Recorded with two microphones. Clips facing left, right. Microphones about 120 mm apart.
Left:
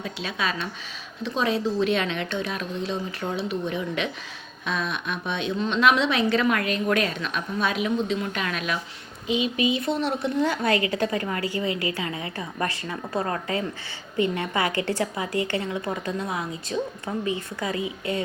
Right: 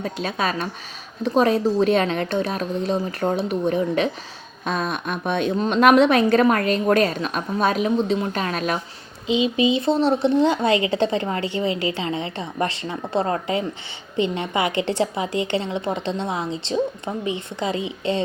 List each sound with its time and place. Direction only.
0.0 s a woman's voice: 40° right (ahead or behind)
9.2 s speech: 25° right (ahead or behind)